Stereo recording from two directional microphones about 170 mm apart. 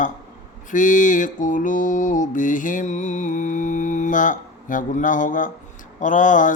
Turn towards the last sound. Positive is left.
turn(degrees=50)  # may be behind; listen again after turning